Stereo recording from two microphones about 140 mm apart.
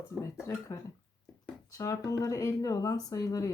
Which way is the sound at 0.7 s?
40° left (ahead or behind).